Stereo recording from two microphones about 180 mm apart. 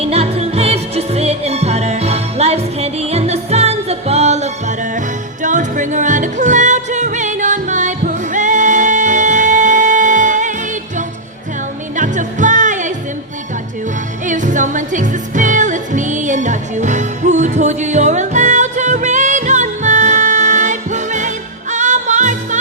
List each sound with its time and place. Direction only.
0.0 s music: 35° right (ahead or behind)
11.9 s music: 45° right (ahead or behind)
14.3 s music: 45° right (ahead or behind)